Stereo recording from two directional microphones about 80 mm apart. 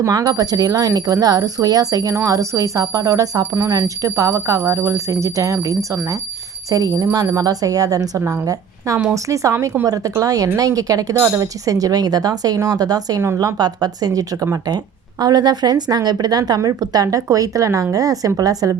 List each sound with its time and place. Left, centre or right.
0.0 s speech: right
13.2 s speech: right
13.6 s a woman's voice: right